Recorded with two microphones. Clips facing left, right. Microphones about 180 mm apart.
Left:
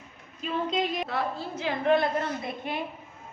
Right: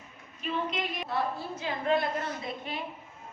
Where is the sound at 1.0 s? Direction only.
90° left; by 2.7 s 55° left (ahead or behind).